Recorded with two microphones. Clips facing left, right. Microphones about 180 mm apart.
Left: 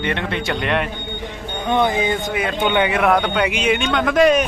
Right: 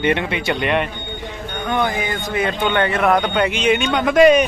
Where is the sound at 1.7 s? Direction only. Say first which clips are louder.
Left 3 dB; 25° left (ahead or behind).